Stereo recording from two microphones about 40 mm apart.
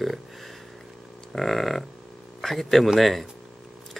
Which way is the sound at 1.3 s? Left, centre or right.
Centre.